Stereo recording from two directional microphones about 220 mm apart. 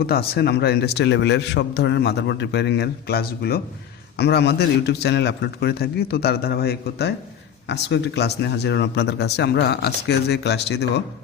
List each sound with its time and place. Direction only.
0.0 s a man's voice: 45° left (ahead or behind)